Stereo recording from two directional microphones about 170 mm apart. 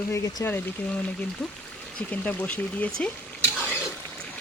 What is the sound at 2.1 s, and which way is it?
Speech, 10° left (ahead or behind).